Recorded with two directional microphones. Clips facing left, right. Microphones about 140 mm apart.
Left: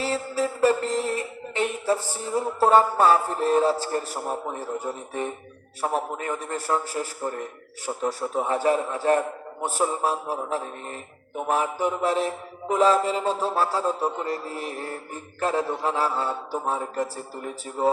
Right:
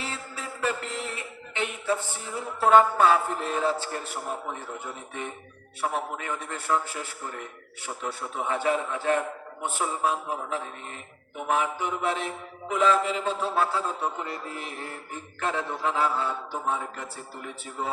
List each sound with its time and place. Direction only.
0.0 s mantra: 40° left (ahead or behind)